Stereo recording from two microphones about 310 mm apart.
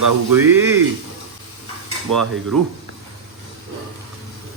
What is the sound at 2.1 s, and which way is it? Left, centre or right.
Dishes, right.